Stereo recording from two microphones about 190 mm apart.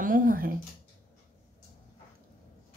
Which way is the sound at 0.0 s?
45° right (ahead or behind).